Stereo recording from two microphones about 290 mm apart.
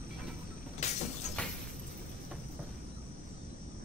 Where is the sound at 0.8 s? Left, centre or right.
Left.